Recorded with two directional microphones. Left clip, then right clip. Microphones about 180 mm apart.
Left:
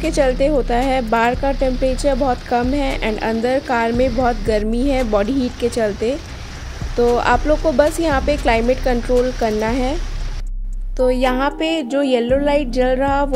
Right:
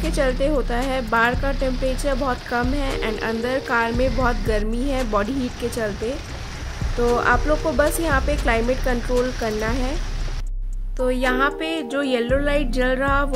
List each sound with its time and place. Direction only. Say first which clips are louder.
0.0 s speech: left 5 dB; 20° left (ahead or behind)
7.2 s speech: left 3 dB; 25° left (ahead or behind)
11.0 s speech: left 4 dB; 20° left (ahead or behind)